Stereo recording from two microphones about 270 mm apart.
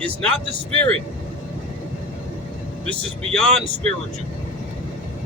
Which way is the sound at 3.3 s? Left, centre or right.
Centre.